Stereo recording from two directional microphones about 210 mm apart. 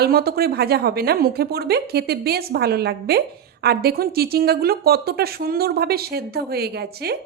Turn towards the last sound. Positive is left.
turn(degrees=-50)  # may be behind; listen again after turning